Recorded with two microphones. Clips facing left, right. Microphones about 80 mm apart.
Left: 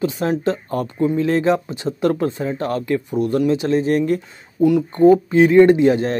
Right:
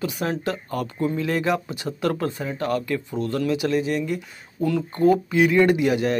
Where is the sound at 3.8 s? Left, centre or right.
Left.